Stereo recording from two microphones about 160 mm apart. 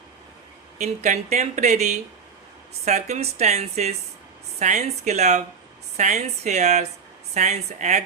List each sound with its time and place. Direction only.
0.8 s speech: 50° right (ahead or behind)